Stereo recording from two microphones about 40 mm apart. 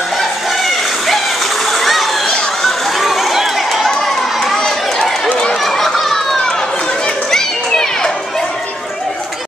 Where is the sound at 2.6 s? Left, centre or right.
Centre.